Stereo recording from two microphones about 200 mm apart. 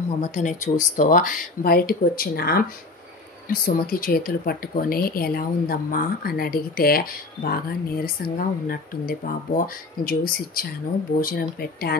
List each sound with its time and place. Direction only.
0.2 s speech: 40° left (ahead or behind)